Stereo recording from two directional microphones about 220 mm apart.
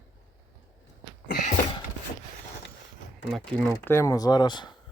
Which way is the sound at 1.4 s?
30° left (ahead or behind).